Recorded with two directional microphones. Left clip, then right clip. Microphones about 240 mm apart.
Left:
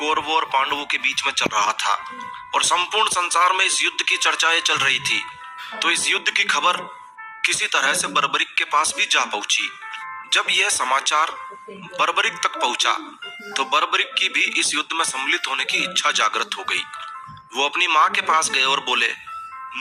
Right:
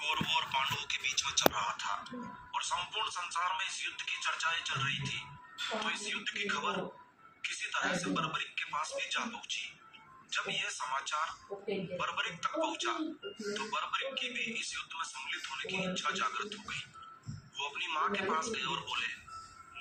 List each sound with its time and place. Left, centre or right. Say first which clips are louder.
0.0 s a man's voice: left 13 dB; left
10.2 s a man's voice: left 17 dB; left